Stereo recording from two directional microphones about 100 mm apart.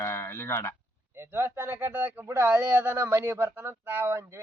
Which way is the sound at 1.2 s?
25° right (ahead or behind).